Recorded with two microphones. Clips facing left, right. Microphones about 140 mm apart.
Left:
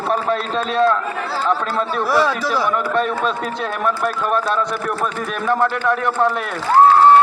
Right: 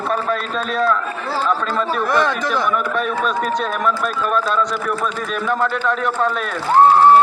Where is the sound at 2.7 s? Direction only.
20° left (ahead or behind).